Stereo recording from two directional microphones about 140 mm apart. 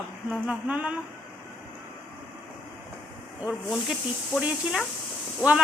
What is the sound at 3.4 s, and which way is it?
Speech, 5° right (ahead or behind).